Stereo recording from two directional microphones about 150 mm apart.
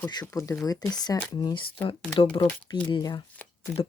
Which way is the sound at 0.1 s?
25° left (ahead or behind).